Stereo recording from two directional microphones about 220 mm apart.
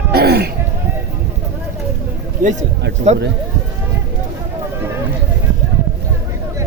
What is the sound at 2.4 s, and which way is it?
Speech, 35° right (ahead or behind).